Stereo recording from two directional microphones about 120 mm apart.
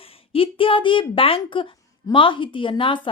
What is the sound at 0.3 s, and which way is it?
A woman's voice, 45° left (ahead or behind).